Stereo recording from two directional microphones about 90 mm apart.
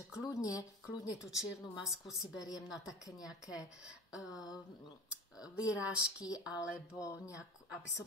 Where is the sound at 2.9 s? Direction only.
40° left (ahead or behind).